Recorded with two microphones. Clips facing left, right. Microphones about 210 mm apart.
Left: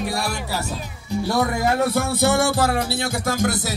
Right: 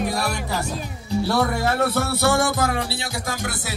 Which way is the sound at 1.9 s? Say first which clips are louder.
Left 1 dB; 20° left (ahead or behind).